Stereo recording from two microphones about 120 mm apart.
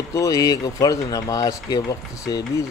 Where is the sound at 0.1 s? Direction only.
30° left (ahead or behind).